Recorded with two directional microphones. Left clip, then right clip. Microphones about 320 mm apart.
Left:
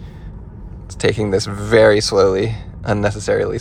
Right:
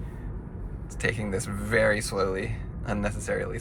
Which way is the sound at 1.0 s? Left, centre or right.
Centre.